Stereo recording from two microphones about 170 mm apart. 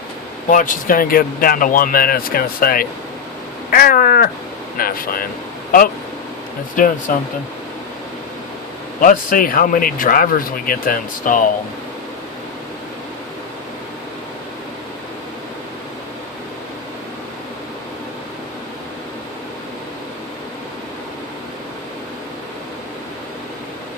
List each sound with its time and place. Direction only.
0.5 s speech: 50° left (ahead or behind)
6.7 s speech: 50° left (ahead or behind)
9.0 s speech: 55° left (ahead or behind)